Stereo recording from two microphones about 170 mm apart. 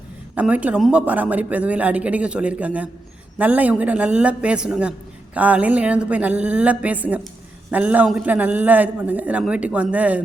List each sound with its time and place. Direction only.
0.3 s a man's voice: 10° right (ahead or behind)